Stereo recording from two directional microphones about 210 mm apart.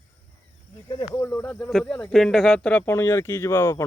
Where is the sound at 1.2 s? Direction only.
10° left (ahead or behind).